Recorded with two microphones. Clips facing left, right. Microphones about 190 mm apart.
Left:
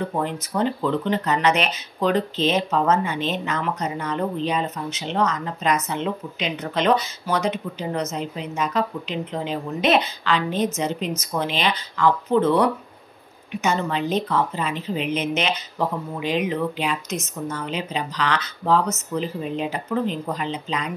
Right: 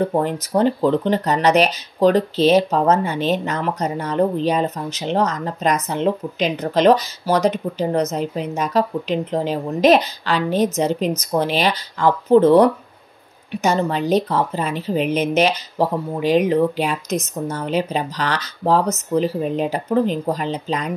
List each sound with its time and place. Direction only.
0.0 s speech: 40° right (ahead or behind)